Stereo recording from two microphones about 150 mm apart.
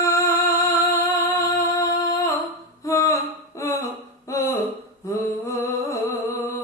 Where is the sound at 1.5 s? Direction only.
20° left (ahead or behind).